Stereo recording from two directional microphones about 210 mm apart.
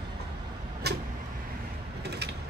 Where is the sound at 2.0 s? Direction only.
50° right (ahead or behind).